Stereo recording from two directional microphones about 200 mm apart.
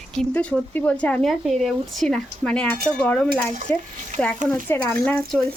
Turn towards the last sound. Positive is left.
turn(degrees=5)  # may be behind; listen again after turning